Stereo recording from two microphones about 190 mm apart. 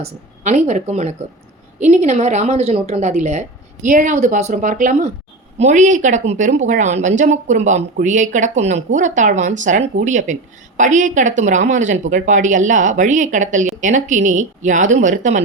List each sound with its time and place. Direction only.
0.0 s a woman's voice: 40° right (ahead or behind)